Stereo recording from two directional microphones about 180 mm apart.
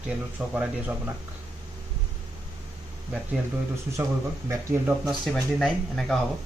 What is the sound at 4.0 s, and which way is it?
Speech, 15° right (ahead or behind).